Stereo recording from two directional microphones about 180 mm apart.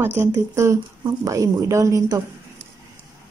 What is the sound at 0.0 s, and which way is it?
Speech, 15° right (ahead or behind).